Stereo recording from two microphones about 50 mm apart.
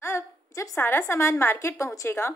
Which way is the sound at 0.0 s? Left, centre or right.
Left.